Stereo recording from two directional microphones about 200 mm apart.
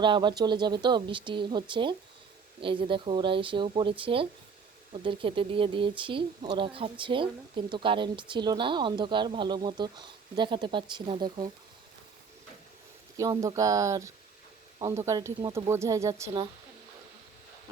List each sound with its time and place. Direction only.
0.0 s speech: 25° right (ahead or behind)
13.1 s speech: 15° right (ahead or behind)